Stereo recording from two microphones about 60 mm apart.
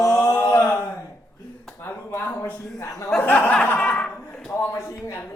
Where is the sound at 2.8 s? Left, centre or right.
Left.